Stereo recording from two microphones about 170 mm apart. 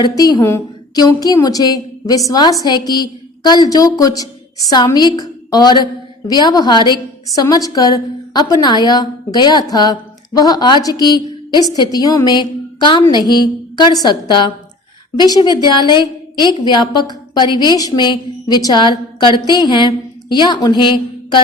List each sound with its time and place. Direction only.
0.0 s a woman's voice: 25° left (ahead or behind)